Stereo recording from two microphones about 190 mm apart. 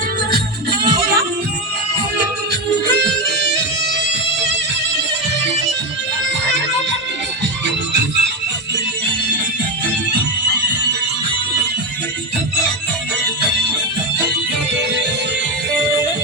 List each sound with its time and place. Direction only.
0.3 s music: 55° right (ahead or behind)